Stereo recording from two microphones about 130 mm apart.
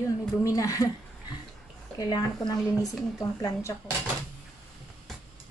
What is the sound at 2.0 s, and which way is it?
Speech, 30° left (ahead or behind).